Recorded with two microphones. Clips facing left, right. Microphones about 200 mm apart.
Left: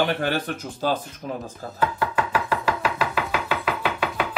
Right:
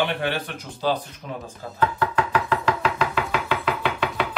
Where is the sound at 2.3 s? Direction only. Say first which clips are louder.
Right 1 dB; 5° left (ahead or behind).